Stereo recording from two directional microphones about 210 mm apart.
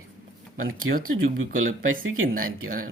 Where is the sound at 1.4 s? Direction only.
75° right (ahead or behind).